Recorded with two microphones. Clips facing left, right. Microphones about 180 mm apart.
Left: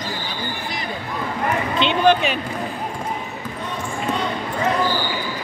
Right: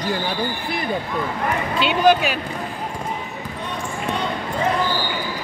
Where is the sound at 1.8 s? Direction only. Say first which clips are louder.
Even; 10° right (ahead or behind).